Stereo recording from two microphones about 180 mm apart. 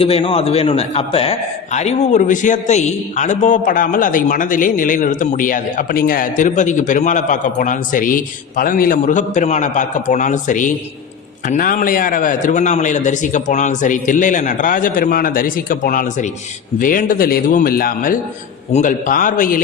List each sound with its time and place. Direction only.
0.0 s a man's voice: 30° left (ahead or behind); by 19.6 s 50° left (ahead or behind)